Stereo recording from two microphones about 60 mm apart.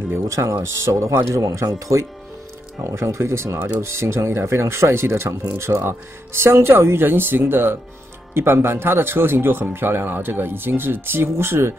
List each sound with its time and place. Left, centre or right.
0.4 s speech: right
3.8 s speech: right